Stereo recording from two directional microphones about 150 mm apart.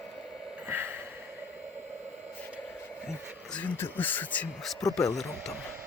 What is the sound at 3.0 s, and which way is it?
Speech, 5° left (ahead or behind).